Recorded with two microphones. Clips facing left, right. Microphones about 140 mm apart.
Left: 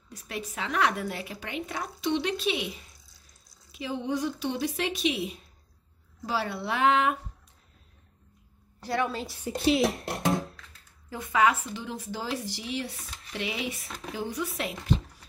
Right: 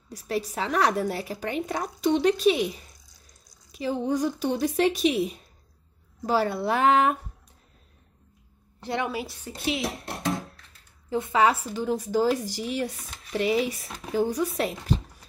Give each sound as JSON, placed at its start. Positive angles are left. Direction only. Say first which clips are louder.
{"t": 0.1, "sound": "a woman's voice", "louder": "right 8 dB", "side_deg": -35}
{"t": 3.7, "sound": "a woman's voice", "louder": "right 4 dB", "side_deg": -40}
{"t": 8.8, "sound": "a woman's voice", "louder": "even", "side_deg": -20}
{"t": 9.5, "sound": "speech", "louder": "left 7 dB", "side_deg": 15}
{"t": 9.8, "sound": "hands", "louder": "left 2 dB", "side_deg": 0}
{"t": 11.1, "sound": "a woman's voice", "louder": "right 3 dB", "side_deg": -25}
{"t": 13.8, "sound": "speech", "louder": "even", "side_deg": 0}
{"t": 14.1, "sound": "speech", "louder": "right 8 dB", "side_deg": -45}